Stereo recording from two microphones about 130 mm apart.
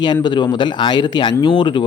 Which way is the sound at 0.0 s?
35° left (ahead or behind).